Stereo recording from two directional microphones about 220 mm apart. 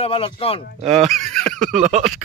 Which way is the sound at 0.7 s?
30° right (ahead or behind).